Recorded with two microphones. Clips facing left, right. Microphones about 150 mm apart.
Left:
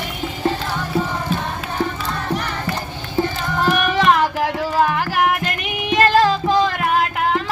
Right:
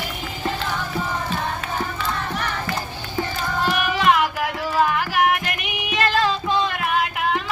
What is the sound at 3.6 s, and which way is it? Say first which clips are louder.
Music: left 3 dB; 35° left (ahead or behind).